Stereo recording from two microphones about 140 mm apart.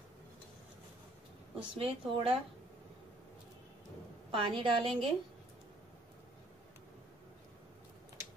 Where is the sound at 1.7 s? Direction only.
40° right (ahead or behind).